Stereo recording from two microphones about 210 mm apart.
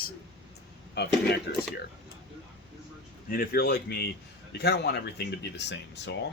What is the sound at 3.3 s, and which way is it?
Speech, 45° left (ahead or behind).